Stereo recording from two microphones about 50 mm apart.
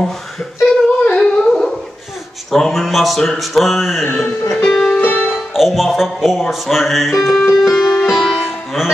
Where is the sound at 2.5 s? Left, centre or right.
Centre.